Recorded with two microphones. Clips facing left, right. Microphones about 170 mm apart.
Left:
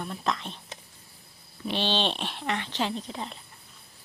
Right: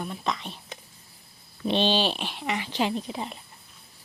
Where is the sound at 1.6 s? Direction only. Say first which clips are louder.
Right 4 dB; 20° right (ahead or behind).